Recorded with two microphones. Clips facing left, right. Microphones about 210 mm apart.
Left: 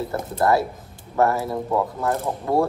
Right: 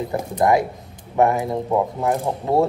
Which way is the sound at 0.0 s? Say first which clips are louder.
Right 2 dB; 15° right (ahead or behind).